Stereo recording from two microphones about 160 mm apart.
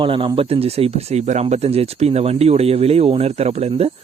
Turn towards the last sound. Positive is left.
turn(degrees=-40)  # may be behind; listen again after turning